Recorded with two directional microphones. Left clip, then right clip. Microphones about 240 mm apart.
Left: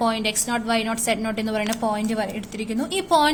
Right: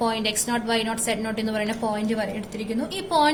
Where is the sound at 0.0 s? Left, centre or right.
Left.